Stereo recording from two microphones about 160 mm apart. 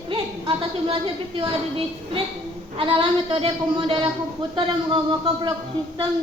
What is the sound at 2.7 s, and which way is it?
Speech, 30° right (ahead or behind).